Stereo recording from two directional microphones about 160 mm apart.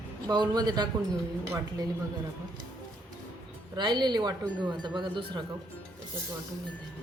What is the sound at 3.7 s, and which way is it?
Speech, 30° right (ahead or behind).